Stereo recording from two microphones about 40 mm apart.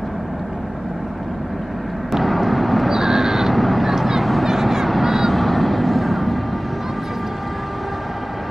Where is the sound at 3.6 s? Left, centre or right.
Centre.